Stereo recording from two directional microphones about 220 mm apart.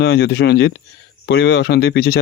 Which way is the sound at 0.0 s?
50° left (ahead or behind).